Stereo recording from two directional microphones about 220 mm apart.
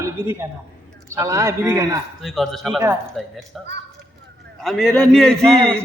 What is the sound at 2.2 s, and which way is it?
Speech, centre (ahead or behind).